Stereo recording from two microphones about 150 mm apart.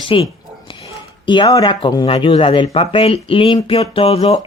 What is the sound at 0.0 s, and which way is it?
Speech, 35° left (ahead or behind).